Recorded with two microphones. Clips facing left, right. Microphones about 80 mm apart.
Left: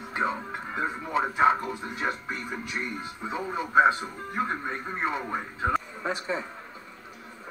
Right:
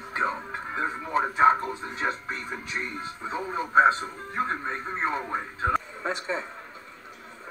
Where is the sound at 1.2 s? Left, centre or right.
Centre.